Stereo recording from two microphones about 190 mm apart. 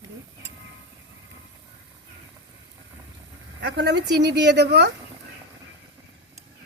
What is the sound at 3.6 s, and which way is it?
Speech, 65° right (ahead or behind).